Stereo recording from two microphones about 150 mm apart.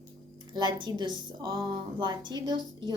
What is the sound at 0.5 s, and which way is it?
A woman's voice, 30° right (ahead or behind).